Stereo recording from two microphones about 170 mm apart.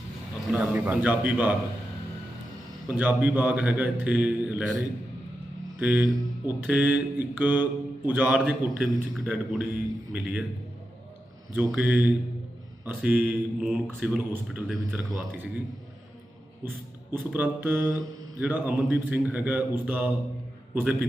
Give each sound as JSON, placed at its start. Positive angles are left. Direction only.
{"t": 0.6, "sound": "mantra", "side_deg": -10}
{"t": 2.9, "sound": "mantra", "side_deg": -10}
{"t": 5.8, "sound": "mantra", "side_deg": -5}
{"t": 11.7, "sound": "mantra", "side_deg": -10}
{"t": 14.0, "sound": "a man's voice", "side_deg": -5}
{"t": 16.6, "sound": "mantra", "side_deg": -10}